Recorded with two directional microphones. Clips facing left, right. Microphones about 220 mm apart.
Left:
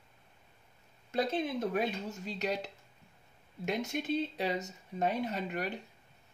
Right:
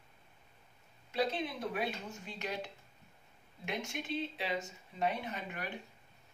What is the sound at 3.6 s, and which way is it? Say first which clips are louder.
Speech: left 6 dB; 40° left (ahead or behind).